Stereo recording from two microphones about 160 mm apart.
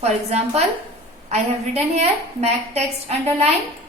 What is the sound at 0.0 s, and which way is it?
A woman's voice, 40° right (ahead or behind).